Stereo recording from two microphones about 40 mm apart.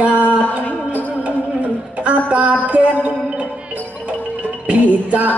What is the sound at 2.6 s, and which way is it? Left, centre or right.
Speech, right.